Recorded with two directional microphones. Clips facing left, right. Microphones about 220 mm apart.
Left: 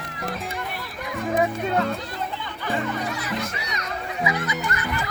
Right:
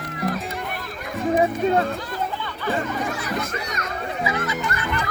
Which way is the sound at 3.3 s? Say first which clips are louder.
Right 2 dB; 50° right (ahead or behind).